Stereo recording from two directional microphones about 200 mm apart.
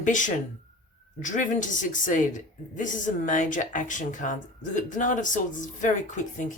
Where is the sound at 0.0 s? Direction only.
40° left (ahead or behind).